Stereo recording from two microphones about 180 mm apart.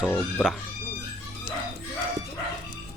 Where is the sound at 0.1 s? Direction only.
10° left (ahead or behind).